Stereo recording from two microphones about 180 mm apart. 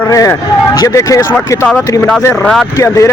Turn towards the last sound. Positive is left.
turn(degrees=15)  # may be behind; listen again after turning